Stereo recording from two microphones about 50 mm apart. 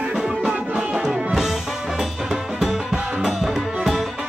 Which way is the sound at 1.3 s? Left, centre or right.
Centre.